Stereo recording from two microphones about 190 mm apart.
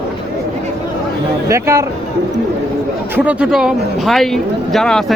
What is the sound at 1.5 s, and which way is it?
Speech, 15° right (ahead or behind).